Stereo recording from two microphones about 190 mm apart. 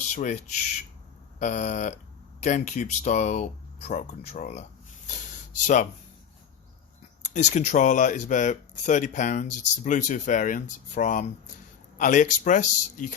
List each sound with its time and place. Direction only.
0.1 s speech: 40° left (ahead or behind)
1.4 s speech: 40° left (ahead or behind)
5.6 s speech: 40° left (ahead or behind)
7.3 s speech: 40° left (ahead or behind)